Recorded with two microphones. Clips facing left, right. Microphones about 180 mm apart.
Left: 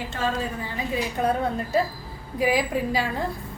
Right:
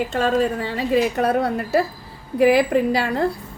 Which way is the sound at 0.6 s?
75° right (ahead or behind).